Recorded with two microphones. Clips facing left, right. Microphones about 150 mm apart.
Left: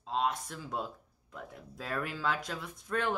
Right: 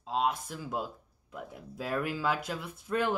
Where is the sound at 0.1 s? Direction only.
5° right (ahead or behind).